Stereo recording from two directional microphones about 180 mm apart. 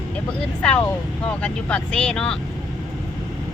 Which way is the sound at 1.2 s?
5° left (ahead or behind).